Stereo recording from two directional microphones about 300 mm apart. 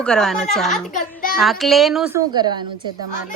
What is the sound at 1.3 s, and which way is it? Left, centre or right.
A woman's voice, centre.